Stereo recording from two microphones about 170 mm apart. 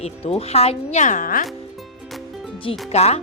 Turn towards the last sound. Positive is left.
turn(degrees=40)  # may be behind; listen again after turning